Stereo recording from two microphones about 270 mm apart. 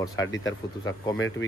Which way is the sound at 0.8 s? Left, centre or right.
Centre.